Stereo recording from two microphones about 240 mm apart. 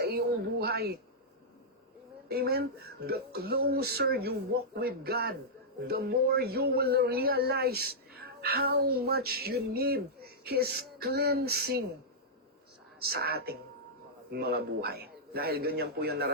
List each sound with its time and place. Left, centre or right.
0.0 s speech: right
2.3 s speech: right
13.0 s speech: right